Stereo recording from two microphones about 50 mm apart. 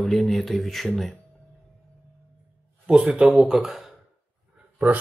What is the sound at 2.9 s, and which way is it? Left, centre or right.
Speech, right.